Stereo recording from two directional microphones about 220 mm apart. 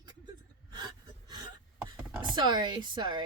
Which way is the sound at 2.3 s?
20° right (ahead or behind).